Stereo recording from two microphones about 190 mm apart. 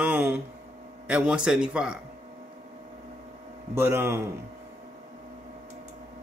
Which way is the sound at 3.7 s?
10° right (ahead or behind).